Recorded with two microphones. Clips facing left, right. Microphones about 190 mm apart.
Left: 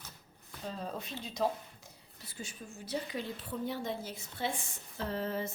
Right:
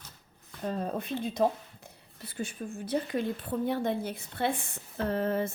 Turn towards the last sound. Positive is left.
turn(degrees=-55)  # may be behind; listen again after turning